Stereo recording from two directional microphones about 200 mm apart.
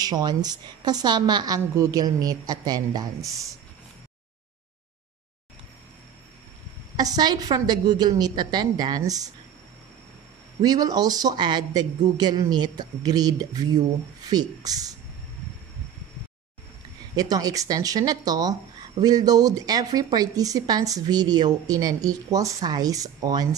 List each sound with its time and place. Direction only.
0.0 s speech: 20° right (ahead or behind)
7.0 s speech: 20° right (ahead or behind)
10.6 s speech: 20° right (ahead or behind)
17.1 s speech: 20° right (ahead or behind)